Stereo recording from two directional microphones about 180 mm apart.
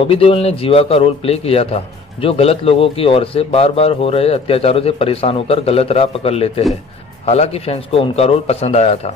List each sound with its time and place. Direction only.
0.0 s speech: 30° left (ahead or behind)